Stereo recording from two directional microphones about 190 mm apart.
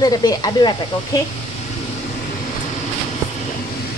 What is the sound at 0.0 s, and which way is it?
Speech, 20° left (ahead or behind).